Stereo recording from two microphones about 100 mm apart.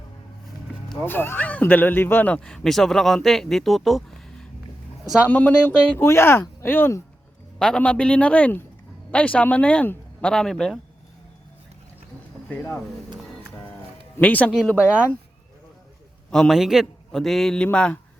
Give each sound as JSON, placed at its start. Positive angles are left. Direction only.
{"t": 1.0, "sound": "speech", "side_deg": 20}
{"t": 5.2, "sound": "speech", "side_deg": 15}
{"t": 7.6, "sound": "speech", "side_deg": 10}
{"t": 12.5, "sound": "speech", "side_deg": 20}
{"t": 14.2, "sound": "speech", "side_deg": 15}
{"t": 16.3, "sound": "a man's voice", "side_deg": 0}